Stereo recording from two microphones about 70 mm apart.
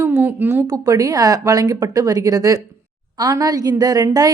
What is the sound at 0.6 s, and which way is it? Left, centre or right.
Speech, right.